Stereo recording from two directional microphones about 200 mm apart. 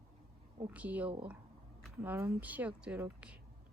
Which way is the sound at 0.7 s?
10° right (ahead or behind).